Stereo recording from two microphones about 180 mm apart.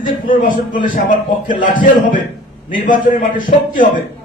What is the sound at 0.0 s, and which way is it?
A man's voice, 50° left (ahead or behind).